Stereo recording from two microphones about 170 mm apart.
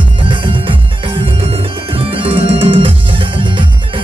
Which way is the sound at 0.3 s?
30° right (ahead or behind).